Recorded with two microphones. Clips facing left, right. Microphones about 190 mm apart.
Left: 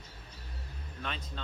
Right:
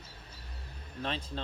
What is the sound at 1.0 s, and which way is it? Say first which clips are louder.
Speech: right 5 dB; 30° right (ahead or behind).